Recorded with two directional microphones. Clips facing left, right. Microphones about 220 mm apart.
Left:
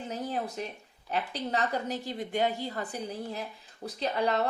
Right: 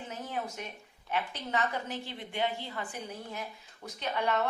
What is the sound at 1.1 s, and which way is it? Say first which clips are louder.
A woman's voice: left 2 dB; 35° left (ahead or behind).